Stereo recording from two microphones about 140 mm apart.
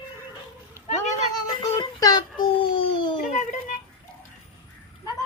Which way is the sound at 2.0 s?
30° left (ahead or behind).